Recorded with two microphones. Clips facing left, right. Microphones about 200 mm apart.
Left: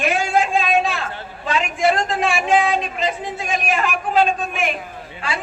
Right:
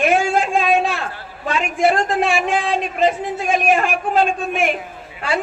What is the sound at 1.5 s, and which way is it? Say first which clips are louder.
Speech: right 1 dB; 50° right (ahead or behind).